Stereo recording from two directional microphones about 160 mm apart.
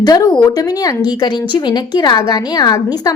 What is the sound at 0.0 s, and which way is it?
A woman's voice, 25° left (ahead or behind).